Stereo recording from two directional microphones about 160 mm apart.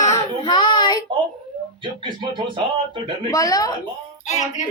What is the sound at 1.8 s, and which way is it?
Speech, 30° right (ahead or behind).